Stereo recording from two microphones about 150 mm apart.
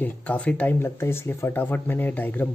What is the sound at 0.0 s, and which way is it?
Speech, 10° left (ahead or behind).